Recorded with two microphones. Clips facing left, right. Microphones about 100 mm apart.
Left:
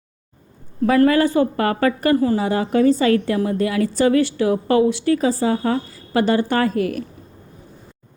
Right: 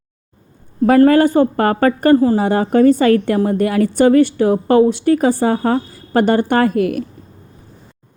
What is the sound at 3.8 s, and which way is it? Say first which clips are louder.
A woman's voice: right 6 dB; 50° right (ahead or behind).